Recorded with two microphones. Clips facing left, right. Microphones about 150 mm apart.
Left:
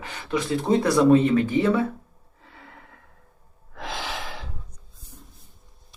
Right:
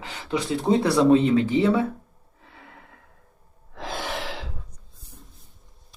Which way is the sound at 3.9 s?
55° right (ahead or behind).